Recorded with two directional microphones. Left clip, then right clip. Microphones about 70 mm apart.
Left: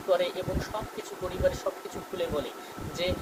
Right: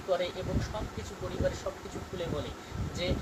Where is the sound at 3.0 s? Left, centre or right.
Left.